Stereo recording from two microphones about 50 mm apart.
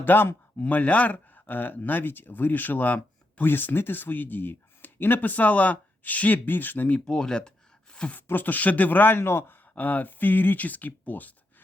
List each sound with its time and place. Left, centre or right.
0.0 s speech: left
0.7 s speech: left
3.4 s speech: left
7.0 s speech: centre
8.1 s speech: left
9.7 s speech: left